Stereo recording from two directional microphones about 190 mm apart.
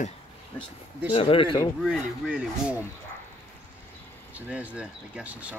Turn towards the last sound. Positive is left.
turn(degrees=-5)  # may be behind; listen again after turning